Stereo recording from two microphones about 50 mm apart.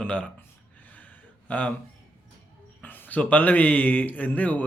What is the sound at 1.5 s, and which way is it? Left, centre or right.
Speech, left.